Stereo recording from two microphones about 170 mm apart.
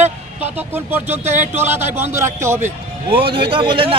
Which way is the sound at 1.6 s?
15° right (ahead or behind).